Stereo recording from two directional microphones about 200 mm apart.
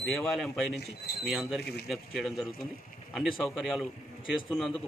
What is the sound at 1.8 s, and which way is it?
Speech, centre (ahead or behind).